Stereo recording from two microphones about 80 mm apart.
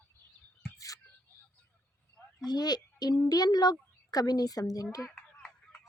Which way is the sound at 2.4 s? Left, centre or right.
Left.